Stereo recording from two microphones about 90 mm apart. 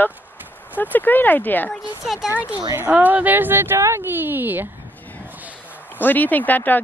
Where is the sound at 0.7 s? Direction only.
20° left (ahead or behind).